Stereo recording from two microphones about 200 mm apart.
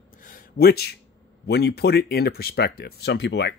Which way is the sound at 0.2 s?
45° left (ahead or behind).